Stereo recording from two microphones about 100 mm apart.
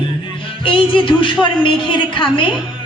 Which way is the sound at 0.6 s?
60° left (ahead or behind).